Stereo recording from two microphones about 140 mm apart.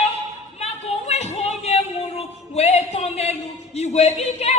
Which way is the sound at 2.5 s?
50° left (ahead or behind).